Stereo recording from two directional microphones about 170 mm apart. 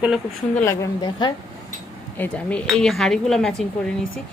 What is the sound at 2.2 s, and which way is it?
Speech, 10° left (ahead or behind).